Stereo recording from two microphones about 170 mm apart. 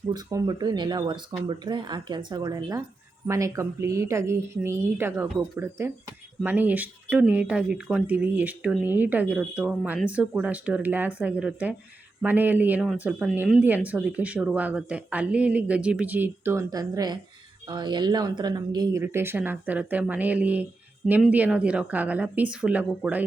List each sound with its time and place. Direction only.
0.1 s speech: 20° right (ahead or behind); by 22.9 s 5° right (ahead or behind)